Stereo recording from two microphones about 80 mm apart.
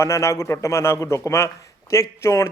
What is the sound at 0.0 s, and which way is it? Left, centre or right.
A man's voice, left.